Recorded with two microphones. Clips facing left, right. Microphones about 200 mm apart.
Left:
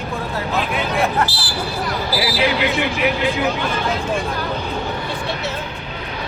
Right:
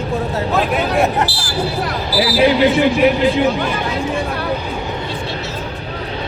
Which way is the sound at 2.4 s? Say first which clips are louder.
Right 9 dB; 30° right (ahead or behind).